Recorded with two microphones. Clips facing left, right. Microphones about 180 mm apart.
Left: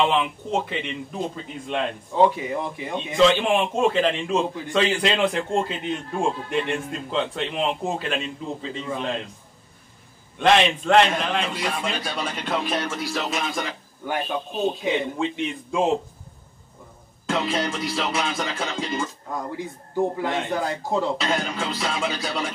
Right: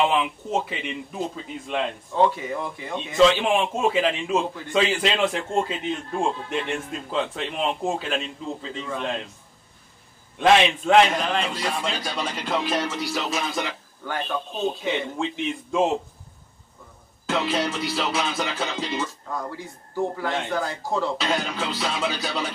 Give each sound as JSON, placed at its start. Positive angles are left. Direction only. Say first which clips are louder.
{"t": 0.2, "sound": "a man's voice", "louder": "even", "side_deg": -5}
{"t": 2.1, "sound": "speech", "louder": "left 2 dB", "side_deg": 15}
{"t": 3.2, "sound": "a man's voice", "louder": "even", "side_deg": 0}
{"t": 10.4, "sound": "a man's voice", "louder": "right 1 dB", "side_deg": -5}
{"t": 14.0, "sound": "speech", "louder": "left 2 dB", "side_deg": 15}
{"t": 14.8, "sound": "a man's voice", "louder": "left 2 dB", "side_deg": 0}
{"t": 17.3, "sound": "a man's voice", "louder": "even", "side_deg": 0}
{"t": 19.3, "sound": "speech", "louder": "left 2 dB", "side_deg": 15}
{"t": 21.2, "sound": "a man's voice", "louder": "even", "side_deg": 0}